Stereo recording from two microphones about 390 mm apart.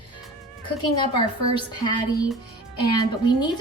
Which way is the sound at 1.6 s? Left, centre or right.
Centre.